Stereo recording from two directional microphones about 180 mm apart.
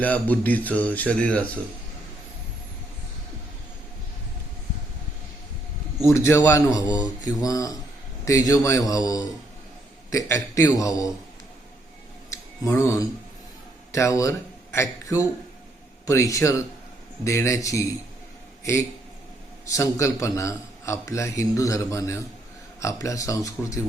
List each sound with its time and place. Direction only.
0.0 s a man's voice: 10° left (ahead or behind)
6.0 s a man's voice: 15° left (ahead or behind)
12.3 s a sound: 15° left (ahead or behind)
13.9 s a man's voice: 15° left (ahead or behind)